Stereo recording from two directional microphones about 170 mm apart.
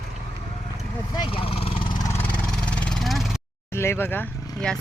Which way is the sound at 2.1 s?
10° left (ahead or behind).